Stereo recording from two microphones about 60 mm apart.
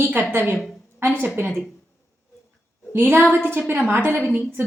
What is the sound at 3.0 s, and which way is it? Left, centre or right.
A woman's voice, right.